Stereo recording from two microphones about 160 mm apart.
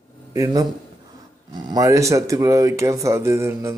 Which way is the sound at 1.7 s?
20° right (ahead or behind).